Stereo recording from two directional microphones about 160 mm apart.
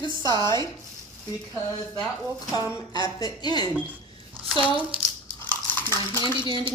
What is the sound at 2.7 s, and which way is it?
Speech, 20° left (ahead or behind).